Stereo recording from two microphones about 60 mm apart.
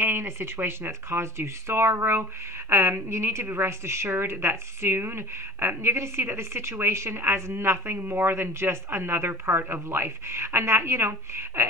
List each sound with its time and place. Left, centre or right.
0.0 s a woman's voice: right